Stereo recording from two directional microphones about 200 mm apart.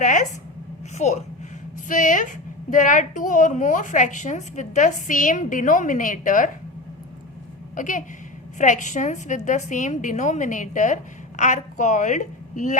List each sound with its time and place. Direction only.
0.0 s a woman's voice: 40° left (ahead or behind)
7.8 s a woman's voice: 40° left (ahead or behind)